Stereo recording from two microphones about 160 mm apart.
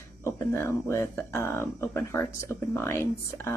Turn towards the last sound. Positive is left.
turn(degrees=15)  # may be behind; listen again after turning